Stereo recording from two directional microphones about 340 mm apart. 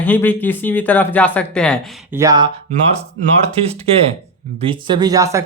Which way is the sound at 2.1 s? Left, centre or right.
Centre.